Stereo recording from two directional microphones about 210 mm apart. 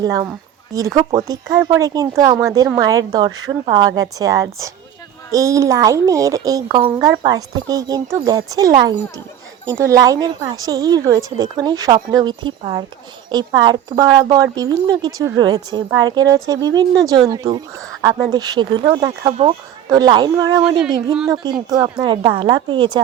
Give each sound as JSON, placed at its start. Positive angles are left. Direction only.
{"t": 0.0, "sound": "a woman's voice", "side_deg": -15}
{"t": 21.7, "sound": "a woman's voice", "side_deg": -20}